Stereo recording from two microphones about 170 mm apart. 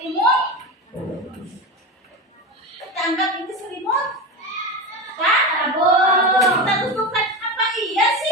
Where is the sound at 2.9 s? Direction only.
Centre (ahead or behind).